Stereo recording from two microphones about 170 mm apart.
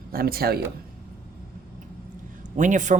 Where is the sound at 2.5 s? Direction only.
45° right (ahead or behind).